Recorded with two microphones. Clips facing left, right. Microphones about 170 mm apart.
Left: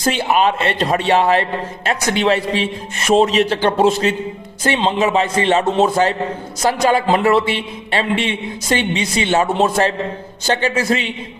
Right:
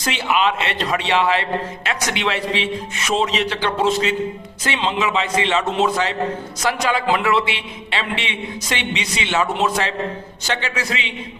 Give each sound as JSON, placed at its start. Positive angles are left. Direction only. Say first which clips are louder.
{"t": 0.0, "sound": "a man's voice", "louder": "left 4 dB", "side_deg": 40}